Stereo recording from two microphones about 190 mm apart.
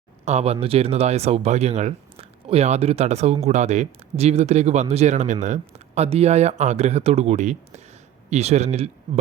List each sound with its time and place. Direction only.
0.3 s speech: 35° right (ahead or behind)